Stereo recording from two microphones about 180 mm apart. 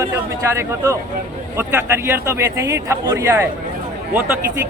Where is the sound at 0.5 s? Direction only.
15° right (ahead or behind).